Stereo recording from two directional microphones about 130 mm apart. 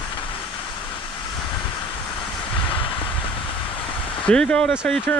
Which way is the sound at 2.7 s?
40° left (ahead or behind).